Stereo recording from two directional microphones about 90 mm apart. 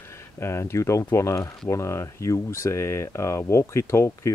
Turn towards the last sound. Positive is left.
turn(degrees=30)  # may be behind; listen again after turning